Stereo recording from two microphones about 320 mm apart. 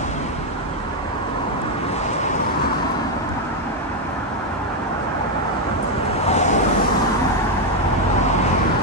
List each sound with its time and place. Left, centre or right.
6.2 s vehicle: left